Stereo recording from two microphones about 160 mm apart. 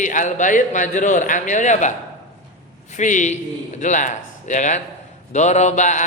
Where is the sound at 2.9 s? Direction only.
50° left (ahead or behind).